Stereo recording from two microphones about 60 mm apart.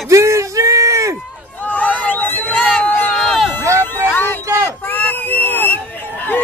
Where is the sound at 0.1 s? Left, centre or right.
Right.